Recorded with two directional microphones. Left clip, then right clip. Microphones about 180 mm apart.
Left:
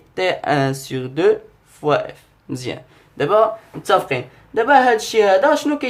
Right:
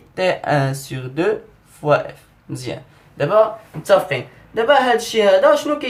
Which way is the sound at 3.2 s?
40° left (ahead or behind).